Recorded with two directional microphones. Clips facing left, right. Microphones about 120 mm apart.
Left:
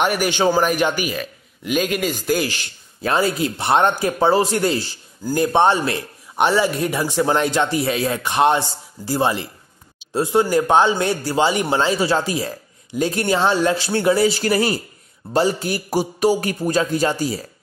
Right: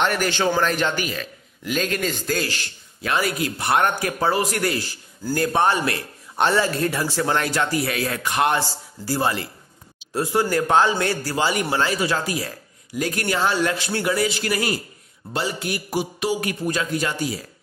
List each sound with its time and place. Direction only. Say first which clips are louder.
0.0 s a man's voice: left 3 dB; 10° left (ahead or behind)
3.0 s a man's voice: left 4 dB; 30° left (ahead or behind)